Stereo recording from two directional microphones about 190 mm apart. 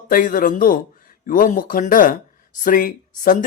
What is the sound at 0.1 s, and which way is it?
Speech, 45° left (ahead or behind).